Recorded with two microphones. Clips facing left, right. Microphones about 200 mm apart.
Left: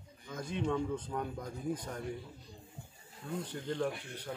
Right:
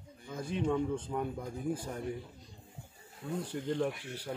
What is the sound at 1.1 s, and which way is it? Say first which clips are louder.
Speech: right 3 dB; 5° right (ahead or behind).